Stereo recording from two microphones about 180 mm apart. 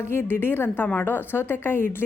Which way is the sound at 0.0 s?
15° left (ahead or behind).